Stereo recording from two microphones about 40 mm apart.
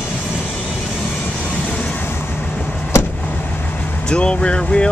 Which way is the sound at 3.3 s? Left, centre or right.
Left.